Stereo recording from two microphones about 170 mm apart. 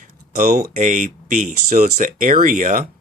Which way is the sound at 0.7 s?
50° right (ahead or behind).